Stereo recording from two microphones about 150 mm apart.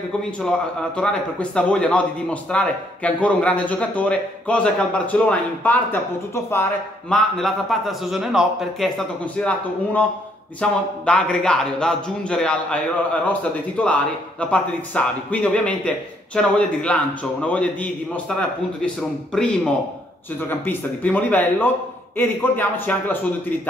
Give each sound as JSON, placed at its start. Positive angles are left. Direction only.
{"t": 0.4, "sound": "a man's voice", "side_deg": 5}
{"t": 7.1, "sound": "a man's voice", "side_deg": 0}